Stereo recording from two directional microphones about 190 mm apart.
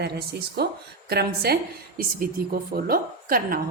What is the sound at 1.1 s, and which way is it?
A woman's voice, 55° right (ahead or behind).